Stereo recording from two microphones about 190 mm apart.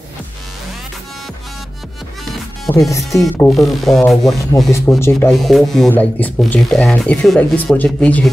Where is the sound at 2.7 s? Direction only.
20° left (ahead or behind).